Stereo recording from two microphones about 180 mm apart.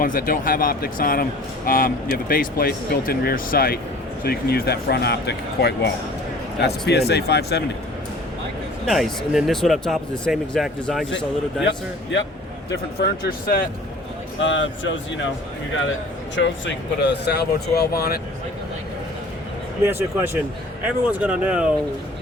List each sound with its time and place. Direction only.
0.0 s speech: 50° left (ahead or behind)
8.9 s speech: centre (ahead or behind)
12.7 s speech: 60° left (ahead or behind)
14.3 s speech: 90° left
16.3 s speech: 90° left; by 18.2 s 60° left (ahead or behind)
19.8 s speech: 10° right (ahead or behind)